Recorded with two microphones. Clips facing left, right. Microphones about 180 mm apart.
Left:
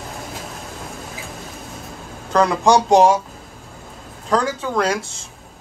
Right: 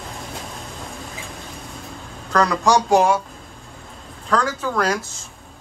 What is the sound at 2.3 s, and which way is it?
Speech, 25° left (ahead or behind).